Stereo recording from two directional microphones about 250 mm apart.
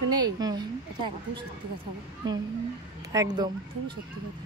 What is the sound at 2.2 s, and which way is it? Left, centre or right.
A woman's voice, centre.